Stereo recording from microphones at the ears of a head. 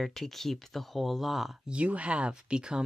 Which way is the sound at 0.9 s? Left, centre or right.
Centre.